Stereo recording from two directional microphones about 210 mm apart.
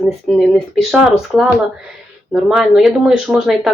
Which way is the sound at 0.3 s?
Centre (ahead or behind).